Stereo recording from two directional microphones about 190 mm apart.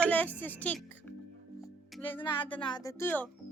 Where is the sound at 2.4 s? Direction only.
25° left (ahead or behind).